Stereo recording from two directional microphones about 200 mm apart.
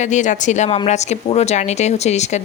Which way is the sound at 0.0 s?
35° left (ahead or behind).